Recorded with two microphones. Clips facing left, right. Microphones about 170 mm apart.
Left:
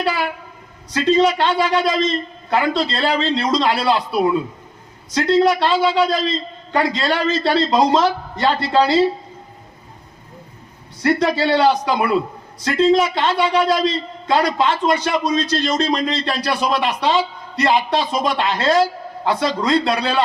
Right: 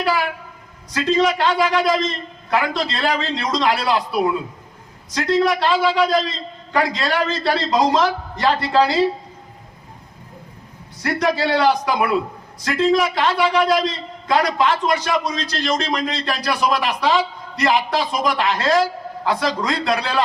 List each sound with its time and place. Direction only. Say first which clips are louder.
0.9 s a man's voice: left 3 dB; 25° left (ahead or behind)
11.0 s a man's voice: left 3 dB; 25° left (ahead or behind)